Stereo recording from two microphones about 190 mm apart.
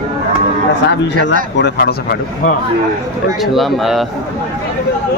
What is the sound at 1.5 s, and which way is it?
Speech, 60° left (ahead or behind).